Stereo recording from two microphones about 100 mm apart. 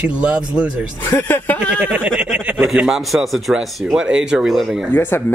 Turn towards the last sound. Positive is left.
turn(degrees=20)  # may be behind; listen again after turning